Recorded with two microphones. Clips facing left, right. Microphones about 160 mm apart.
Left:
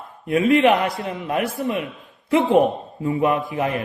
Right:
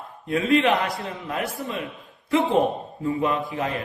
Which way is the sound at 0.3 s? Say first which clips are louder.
Left 4 dB; 20° left (ahead or behind).